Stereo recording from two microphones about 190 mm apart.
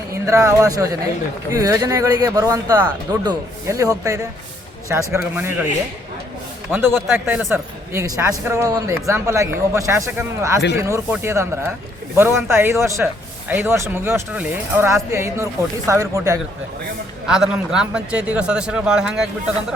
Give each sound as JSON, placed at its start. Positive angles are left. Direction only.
{"t": 0.1, "sound": "speech", "side_deg": -15}
{"t": 6.7, "sound": "speech", "side_deg": -10}
{"t": 17.2, "sound": "a man's voice", "side_deg": -5}